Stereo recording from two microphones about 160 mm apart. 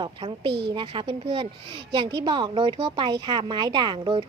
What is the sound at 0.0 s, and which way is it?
A woman's voice, 30° right (ahead or behind).